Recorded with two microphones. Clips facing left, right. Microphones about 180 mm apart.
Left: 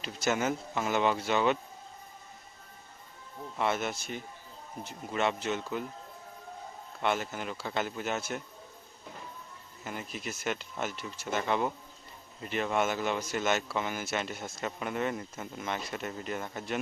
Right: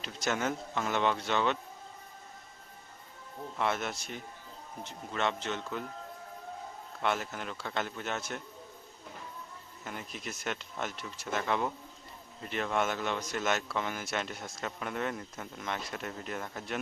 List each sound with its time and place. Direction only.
0.0 s speech: 5° left (ahead or behind)
3.6 s speech: centre (ahead or behind)
7.0 s speech: centre (ahead or behind)
9.8 s speech: 5° left (ahead or behind)